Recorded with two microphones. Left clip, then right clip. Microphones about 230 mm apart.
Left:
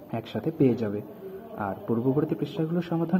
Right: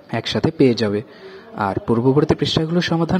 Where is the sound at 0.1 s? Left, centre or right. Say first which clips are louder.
Right 11 dB; right.